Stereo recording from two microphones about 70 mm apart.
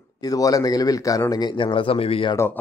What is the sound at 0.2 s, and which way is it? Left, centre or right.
Speech, left.